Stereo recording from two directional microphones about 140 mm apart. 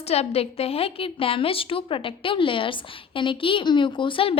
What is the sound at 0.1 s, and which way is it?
A woman's voice, 45° left (ahead or behind).